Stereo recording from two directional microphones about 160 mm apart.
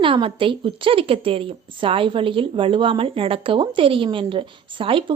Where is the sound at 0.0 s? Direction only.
30° right (ahead or behind).